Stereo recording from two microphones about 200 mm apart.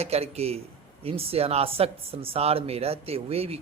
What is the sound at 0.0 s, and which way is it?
A man's voice, 30° right (ahead or behind).